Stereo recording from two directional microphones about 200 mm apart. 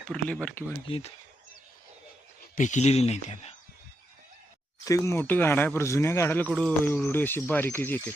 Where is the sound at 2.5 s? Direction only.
40° left (ahead or behind).